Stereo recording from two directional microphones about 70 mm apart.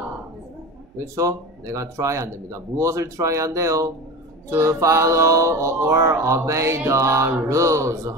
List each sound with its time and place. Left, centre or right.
1.1 s music: right